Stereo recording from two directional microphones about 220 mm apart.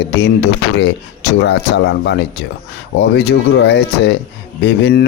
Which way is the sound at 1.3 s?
55° left (ahead or behind).